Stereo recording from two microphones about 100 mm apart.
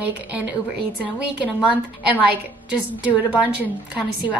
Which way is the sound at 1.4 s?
15° right (ahead or behind).